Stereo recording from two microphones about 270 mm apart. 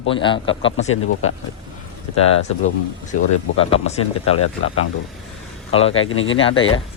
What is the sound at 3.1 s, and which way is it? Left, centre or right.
Speech, left.